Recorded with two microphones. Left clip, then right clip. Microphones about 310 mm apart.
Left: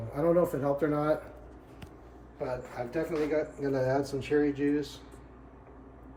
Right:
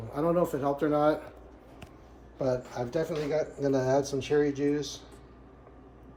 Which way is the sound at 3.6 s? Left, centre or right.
Right.